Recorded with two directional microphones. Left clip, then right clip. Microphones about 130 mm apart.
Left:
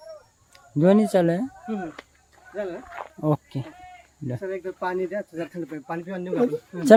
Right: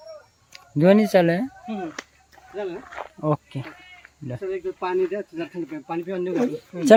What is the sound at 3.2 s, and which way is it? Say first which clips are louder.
Speech: right 1 dB; 50° left (ahead or behind).